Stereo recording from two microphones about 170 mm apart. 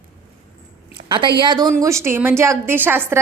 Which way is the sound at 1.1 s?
30° right (ahead or behind).